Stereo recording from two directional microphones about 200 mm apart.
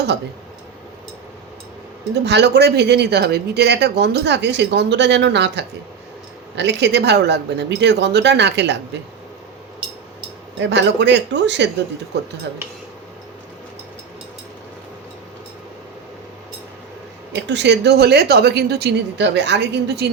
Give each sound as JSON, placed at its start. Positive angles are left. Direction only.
{"t": 2.2, "sound": "speech", "side_deg": -55}
{"t": 10.6, "sound": "speech", "side_deg": -60}
{"t": 17.4, "sound": "speech", "side_deg": -60}